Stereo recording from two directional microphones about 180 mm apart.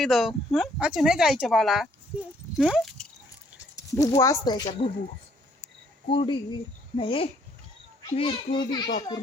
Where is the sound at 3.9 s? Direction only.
15° left (ahead or behind).